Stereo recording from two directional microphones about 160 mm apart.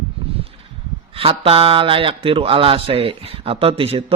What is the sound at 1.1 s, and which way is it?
Speech, 35° right (ahead or behind).